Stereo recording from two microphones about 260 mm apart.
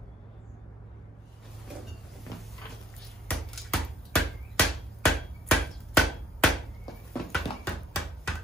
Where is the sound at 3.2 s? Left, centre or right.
Centre.